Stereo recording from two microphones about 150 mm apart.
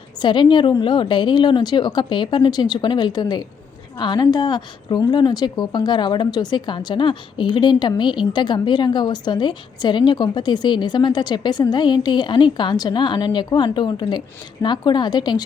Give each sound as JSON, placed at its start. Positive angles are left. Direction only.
{"t": 0.2, "sound": "a woman's voice", "side_deg": 30}